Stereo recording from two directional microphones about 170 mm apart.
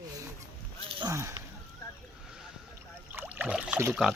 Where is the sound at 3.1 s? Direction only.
10° right (ahead or behind).